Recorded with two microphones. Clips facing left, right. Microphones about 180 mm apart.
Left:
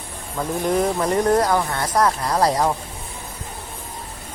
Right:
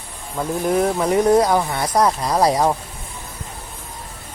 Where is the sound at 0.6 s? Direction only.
5° right (ahead or behind).